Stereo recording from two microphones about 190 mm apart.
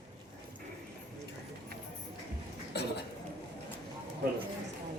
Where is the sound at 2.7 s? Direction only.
60° left (ahead or behind).